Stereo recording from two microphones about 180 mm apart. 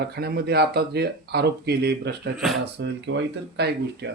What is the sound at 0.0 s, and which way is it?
Speech, 65° right (ahead or behind).